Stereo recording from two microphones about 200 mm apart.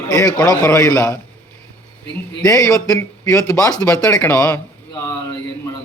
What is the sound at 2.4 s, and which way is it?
Speech, 15° left (ahead or behind).